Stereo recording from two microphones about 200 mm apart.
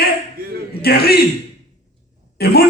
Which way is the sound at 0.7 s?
50° left (ahead or behind).